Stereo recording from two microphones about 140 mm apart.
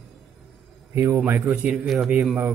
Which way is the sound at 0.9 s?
15° right (ahead or behind).